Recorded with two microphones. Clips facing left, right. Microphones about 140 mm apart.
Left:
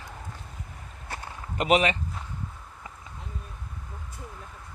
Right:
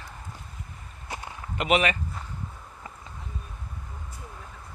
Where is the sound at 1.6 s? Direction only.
35° left (ahead or behind).